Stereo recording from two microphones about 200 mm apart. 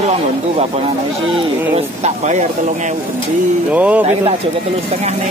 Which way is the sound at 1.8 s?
35° right (ahead or behind).